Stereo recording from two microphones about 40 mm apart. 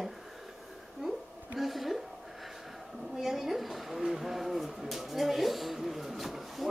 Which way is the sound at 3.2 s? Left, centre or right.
Centre.